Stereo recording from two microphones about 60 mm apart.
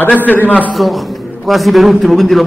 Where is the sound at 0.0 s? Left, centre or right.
Left.